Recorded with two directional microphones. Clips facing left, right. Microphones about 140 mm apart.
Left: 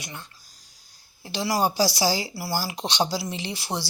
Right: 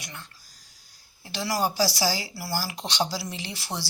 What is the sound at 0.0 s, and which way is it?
Speech, 20° left (ahead or behind).